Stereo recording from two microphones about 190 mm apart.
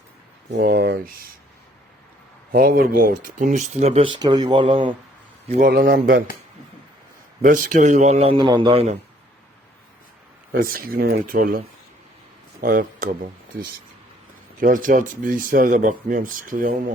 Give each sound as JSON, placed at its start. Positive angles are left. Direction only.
{"t": 0.6, "sound": "speech", "side_deg": -50}
{"t": 2.5, "sound": "speech", "side_deg": -50}
{"t": 5.5, "sound": "speech", "side_deg": -45}
{"t": 7.4, "sound": "speech", "side_deg": -45}
{"t": 10.5, "sound": "speech", "side_deg": -50}
{"t": 12.6, "sound": "speech", "side_deg": -45}
{"t": 14.6, "sound": "speech", "side_deg": -45}